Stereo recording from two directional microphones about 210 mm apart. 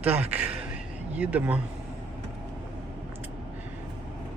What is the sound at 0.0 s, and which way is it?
Speech, 5° right (ahead or behind).